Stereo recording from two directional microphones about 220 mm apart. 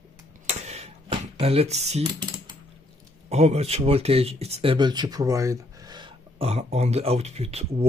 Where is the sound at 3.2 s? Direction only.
30° right (ahead or behind).